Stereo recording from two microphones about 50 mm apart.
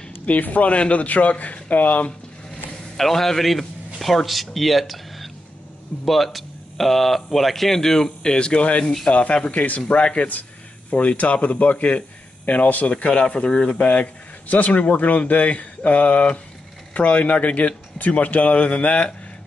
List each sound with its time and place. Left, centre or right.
0.3 s speech: left
3.0 s a man's voice: centre; by 19.1 s left